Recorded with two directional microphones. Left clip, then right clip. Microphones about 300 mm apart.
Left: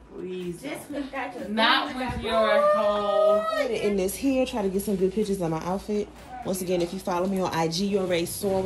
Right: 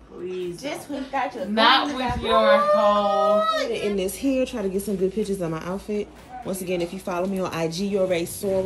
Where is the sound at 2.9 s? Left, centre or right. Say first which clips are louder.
Right 2 dB; centre.